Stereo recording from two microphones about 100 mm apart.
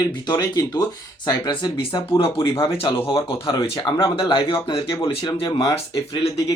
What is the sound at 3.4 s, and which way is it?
Speech, 50° left (ahead or behind).